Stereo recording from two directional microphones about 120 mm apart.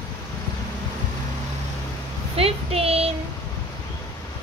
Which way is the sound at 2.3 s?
55° right (ahead or behind).